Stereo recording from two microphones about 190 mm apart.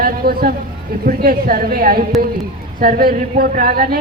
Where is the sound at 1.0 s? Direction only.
50° right (ahead or behind).